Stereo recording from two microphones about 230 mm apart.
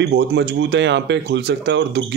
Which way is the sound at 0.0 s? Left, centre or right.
Right.